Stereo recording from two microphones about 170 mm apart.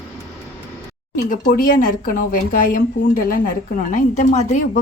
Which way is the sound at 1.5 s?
55° left (ahead or behind).